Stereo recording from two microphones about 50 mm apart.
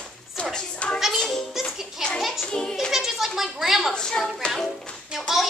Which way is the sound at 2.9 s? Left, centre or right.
Centre.